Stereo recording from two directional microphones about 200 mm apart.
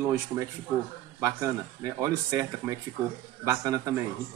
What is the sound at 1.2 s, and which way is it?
Speech, 15° right (ahead or behind).